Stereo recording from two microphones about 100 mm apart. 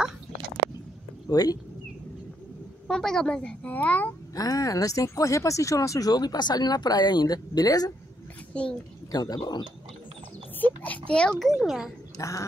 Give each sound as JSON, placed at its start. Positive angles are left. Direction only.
{"t": 1.3, "sound": "speech", "side_deg": 40}
{"t": 2.9, "sound": "a woman's voice", "side_deg": 5}
{"t": 4.4, "sound": "speech", "side_deg": 35}
{"t": 8.5, "sound": "a woman's voice", "side_deg": 10}
{"t": 9.1, "sound": "speech", "side_deg": 40}
{"t": 11.1, "sound": "a child's voice", "side_deg": 10}
{"t": 12.2, "sound": "speech", "side_deg": 30}